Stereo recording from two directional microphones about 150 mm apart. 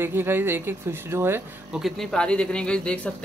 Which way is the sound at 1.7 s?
Centre (ahead or behind).